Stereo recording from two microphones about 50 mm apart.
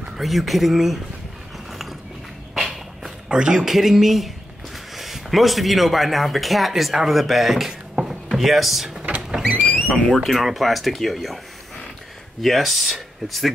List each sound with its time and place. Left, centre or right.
0.2 s speech: centre
1.7 s a sound: centre
2.5 s walk: centre
3.3 s speech: centre
9.5 s a sound: right
9.9 s speech: centre
12.4 s speech: centre